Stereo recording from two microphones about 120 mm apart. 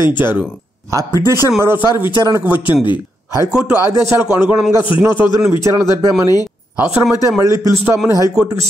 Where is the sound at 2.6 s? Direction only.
40° left (ahead or behind).